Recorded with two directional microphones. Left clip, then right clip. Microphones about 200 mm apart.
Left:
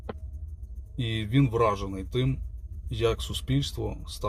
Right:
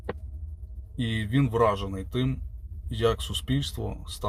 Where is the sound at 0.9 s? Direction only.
10° left (ahead or behind).